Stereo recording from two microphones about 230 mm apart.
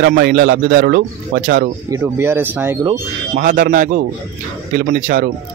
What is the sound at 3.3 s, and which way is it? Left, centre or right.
Speech, right.